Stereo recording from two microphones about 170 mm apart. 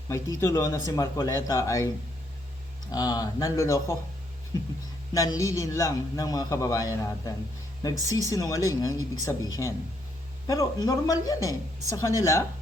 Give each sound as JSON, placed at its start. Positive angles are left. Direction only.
{"t": 0.1, "sound": "a man's voice", "side_deg": 20}
{"t": 2.9, "sound": "a man's voice", "side_deg": 25}
{"t": 5.1, "sound": "a man's voice", "side_deg": 20}